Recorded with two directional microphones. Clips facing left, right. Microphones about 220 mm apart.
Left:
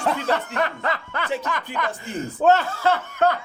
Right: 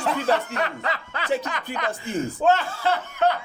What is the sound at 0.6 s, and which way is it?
Speech, 50° left (ahead or behind).